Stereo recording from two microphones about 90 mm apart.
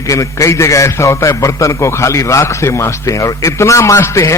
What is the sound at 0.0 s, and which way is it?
A man's voice, 35° left (ahead or behind).